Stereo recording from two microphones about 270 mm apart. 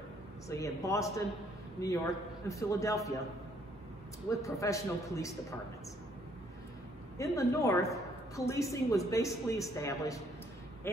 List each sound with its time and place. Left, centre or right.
0.5 s a woman's voice: centre
2.4 s a woman's voice: centre
4.3 s a woman's voice: centre
7.2 s a woman's voice: centre